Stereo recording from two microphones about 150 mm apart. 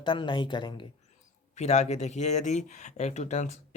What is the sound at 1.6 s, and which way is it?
Speech, 45° left (ahead or behind).